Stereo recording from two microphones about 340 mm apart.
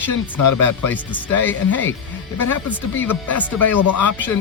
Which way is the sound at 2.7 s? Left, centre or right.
Centre.